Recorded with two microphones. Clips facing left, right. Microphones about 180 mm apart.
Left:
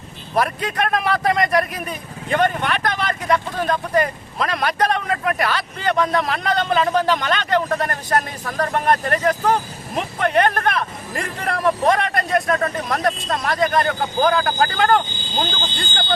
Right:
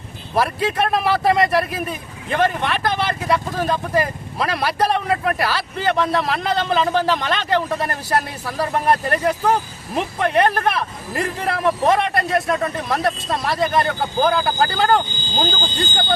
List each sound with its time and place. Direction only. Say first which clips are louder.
0.3 s speech: right 2 dB; 5° right (ahead or behind)
15.6 s speech: right 3 dB; 40° right (ahead or behind)